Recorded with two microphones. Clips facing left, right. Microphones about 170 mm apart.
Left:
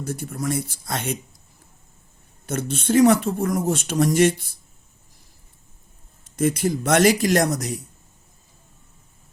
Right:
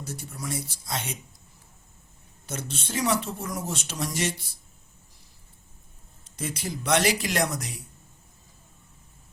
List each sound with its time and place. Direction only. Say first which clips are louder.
0.0 s speech: left 9 dB; 55° left (ahead or behind)
2.5 s speech: left 12 dB; 55° left (ahead or behind)
6.2 s speech: left 12 dB; 50° left (ahead or behind)